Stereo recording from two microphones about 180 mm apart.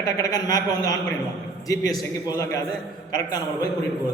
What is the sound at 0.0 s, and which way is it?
A man's voice, 20° left (ahead or behind).